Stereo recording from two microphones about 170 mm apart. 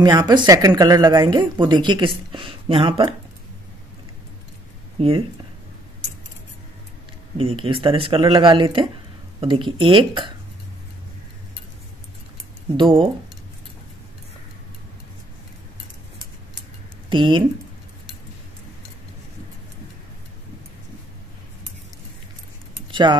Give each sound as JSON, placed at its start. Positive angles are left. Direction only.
{"t": 0.0, "sound": "speech", "side_deg": -25}
{"t": 5.0, "sound": "speech", "side_deg": -35}
{"t": 7.3, "sound": "speech", "side_deg": -35}
{"t": 12.7, "sound": "speech", "side_deg": -30}
{"t": 17.1, "sound": "speech", "side_deg": -30}
{"t": 22.8, "sound": "keys jangling", "side_deg": -30}